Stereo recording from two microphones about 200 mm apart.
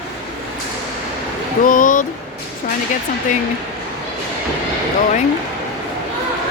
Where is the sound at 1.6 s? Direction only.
40° left (ahead or behind).